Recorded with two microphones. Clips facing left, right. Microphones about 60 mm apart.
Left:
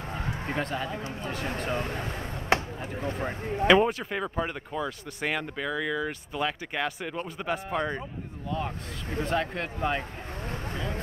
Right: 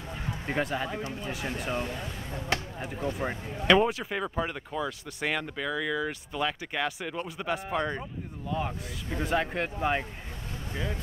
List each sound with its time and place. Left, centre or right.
0.6 s speech: centre
1.7 s speech: left
2.5 s chop: left
3.0 s speech: left
3.6 s speech: centre
8.5 s speech: centre
10.7 s speech: left